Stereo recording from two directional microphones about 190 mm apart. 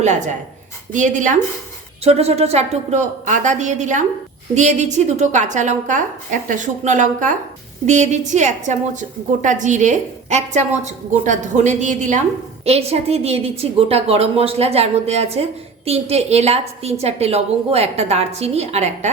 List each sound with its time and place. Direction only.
0.9 s a woman's voice: 40° right (ahead or behind)